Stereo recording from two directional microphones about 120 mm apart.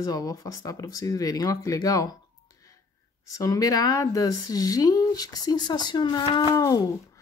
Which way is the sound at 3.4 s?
30° left (ahead or behind).